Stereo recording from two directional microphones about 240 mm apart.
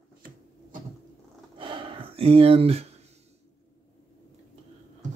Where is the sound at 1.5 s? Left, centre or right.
Right.